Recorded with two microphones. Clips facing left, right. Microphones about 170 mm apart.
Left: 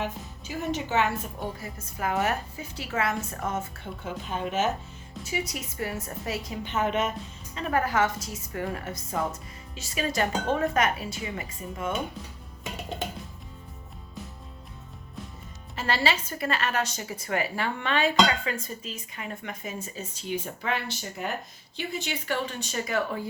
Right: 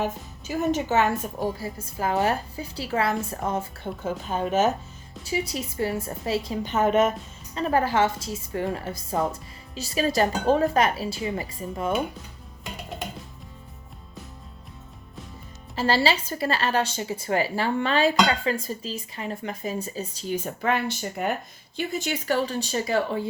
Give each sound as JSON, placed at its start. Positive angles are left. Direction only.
{"t": 0.0, "sound": "a woman's voice", "side_deg": -45}
{"t": 7.5, "sound": "a woman's voice", "side_deg": -30}
{"t": 15.7, "sound": "a woman's voice", "side_deg": -30}